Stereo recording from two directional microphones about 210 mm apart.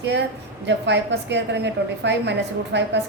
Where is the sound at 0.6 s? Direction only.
55° right (ahead or behind).